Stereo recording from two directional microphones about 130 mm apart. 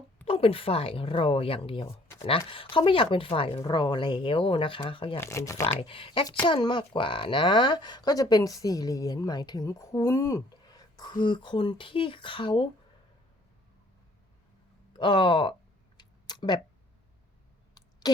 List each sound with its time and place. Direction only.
0.3 s speech: 45° left (ahead or behind)
3.6 s speech: 35° left (ahead or behind)
5.2 s speech: 25° left (ahead or behind)
5.8 s speech: 45° left (ahead or behind)
14.9 s speech: 40° left (ahead or behind)
16.0 s a sound: 35° left (ahead or behind)
18.0 s a sound: 30° left (ahead or behind)